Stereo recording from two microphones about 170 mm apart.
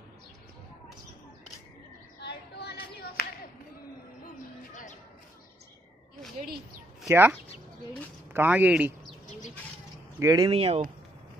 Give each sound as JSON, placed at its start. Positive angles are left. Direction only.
{"t": 2.2, "sound": "a sound", "side_deg": 75}
{"t": 7.1, "sound": "speech", "side_deg": -10}
{"t": 10.1, "sound": "speech", "side_deg": -20}
{"t": 10.5, "sound": "speech", "side_deg": -35}